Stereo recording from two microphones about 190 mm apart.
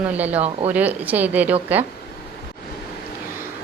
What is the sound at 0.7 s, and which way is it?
Speech, 10° right (ahead or behind).